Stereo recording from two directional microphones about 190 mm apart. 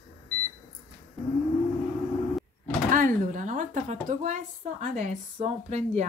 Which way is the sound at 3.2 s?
45° right (ahead or behind).